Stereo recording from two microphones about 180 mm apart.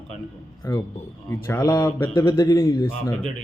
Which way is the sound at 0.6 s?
20° left (ahead or behind).